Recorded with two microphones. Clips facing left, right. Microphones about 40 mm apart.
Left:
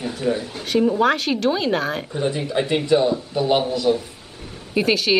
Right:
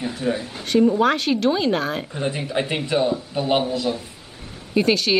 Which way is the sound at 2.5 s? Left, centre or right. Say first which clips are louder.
Left 8 dB; centre.